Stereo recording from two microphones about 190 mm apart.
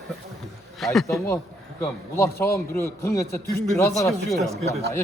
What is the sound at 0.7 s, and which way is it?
Speech, centre (ahead or behind).